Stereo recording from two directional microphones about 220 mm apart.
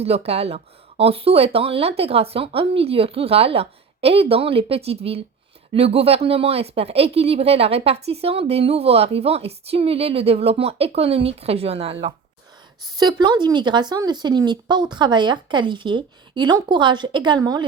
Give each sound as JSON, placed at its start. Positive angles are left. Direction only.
{"t": 0.0, "sound": "speech", "side_deg": -30}